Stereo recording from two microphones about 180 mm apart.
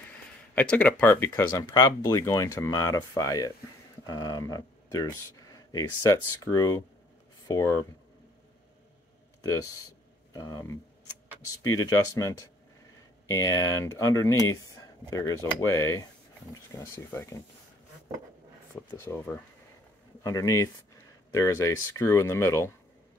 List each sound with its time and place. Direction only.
0.6 s speech: 10° left (ahead or behind)
1.3 s speech: 20° left (ahead or behind)
9.4 s speech: 15° left (ahead or behind)
18.9 s speech: 15° left (ahead or behind)